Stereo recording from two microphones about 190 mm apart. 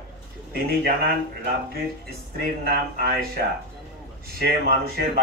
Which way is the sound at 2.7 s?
55° right (ahead or behind).